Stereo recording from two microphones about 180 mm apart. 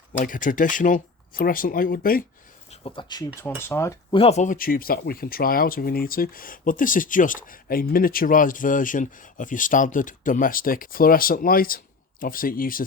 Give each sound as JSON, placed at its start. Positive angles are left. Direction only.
{"t": 0.2, "sound": "speech", "side_deg": 45}
{"t": 2.6, "sound": "speech", "side_deg": 30}
{"t": 3.6, "sound": "speech", "side_deg": 15}
{"t": 4.1, "sound": "speech", "side_deg": 35}